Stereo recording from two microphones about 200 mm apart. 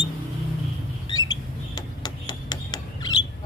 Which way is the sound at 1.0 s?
20° left (ahead or behind).